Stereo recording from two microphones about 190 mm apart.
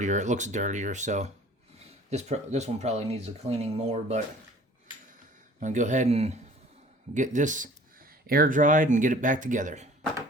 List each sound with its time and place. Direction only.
0.0 s speech: 40° right (ahead or behind)
5.5 s speech: 40° right (ahead or behind)